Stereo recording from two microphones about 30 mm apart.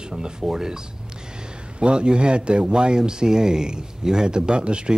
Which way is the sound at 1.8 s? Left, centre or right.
Right.